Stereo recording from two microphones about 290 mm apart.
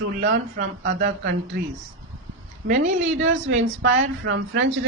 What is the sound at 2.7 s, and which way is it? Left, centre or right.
Speech, right.